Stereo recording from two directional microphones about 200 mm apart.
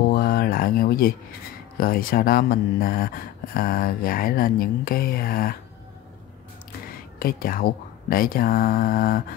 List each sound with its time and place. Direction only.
0.1 s a sound: 45° left (ahead or behind)
1.8 s speech: 45° left (ahead or behind)
7.2 s speech: 45° left (ahead or behind)